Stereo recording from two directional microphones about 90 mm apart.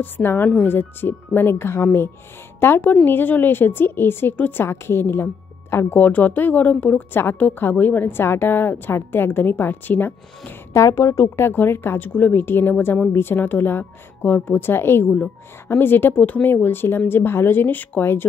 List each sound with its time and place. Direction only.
0.0 s a woman's voice: 20° left (ahead or behind)